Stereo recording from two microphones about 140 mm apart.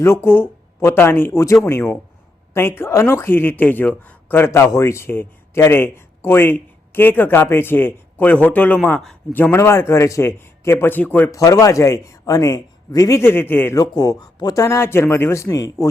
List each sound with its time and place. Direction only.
0.0 s a man's voice: 20° left (ahead or behind); by 9.1 s 5° left (ahead or behind)
9.3 s speech: 15° left (ahead or behind)
11.3 s a man's voice: 25° left (ahead or behind)
13.9 s a man's voice: 25° left (ahead or behind)